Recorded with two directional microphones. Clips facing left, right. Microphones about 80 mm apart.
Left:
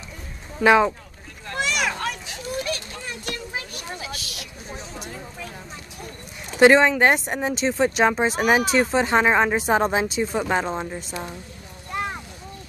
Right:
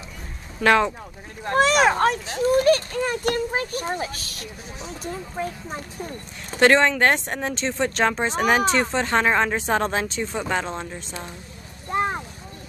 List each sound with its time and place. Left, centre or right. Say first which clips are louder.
0.6 s speech: left 2 dB; centre
1.4 s speech: right 8 dB; right
6.6 s speech: left 2 dB; centre
11.9 s vehicle: right 5 dB; right